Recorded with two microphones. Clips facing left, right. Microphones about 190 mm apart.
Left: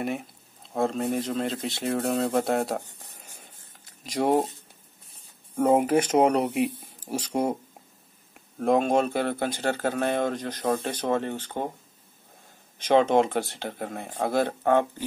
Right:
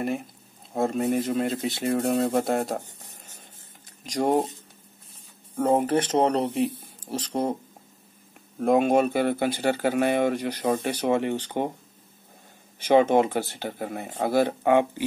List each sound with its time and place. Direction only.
0.0 s speech: centre (ahead or behind)
4.0 s speech: 5° left (ahead or behind)
5.6 s speech: 10° left (ahead or behind)
8.5 s speech: 5° right (ahead or behind)
12.7 s speech: 10° right (ahead or behind)